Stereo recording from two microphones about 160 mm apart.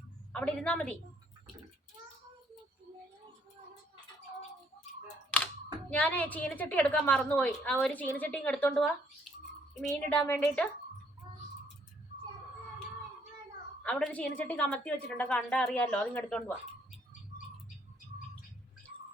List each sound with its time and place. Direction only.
0.3 s a woman's voice: 5° left (ahead or behind)
5.3 s computer keyboard: 10° left (ahead or behind)
5.9 s a woman's voice: 10° left (ahead or behind)
11.2 s bird: 25° right (ahead or behind)
13.8 s a woman's voice: 5° left (ahead or behind)